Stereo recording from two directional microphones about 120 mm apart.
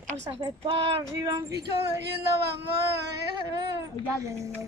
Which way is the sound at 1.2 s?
30° right (ahead or behind).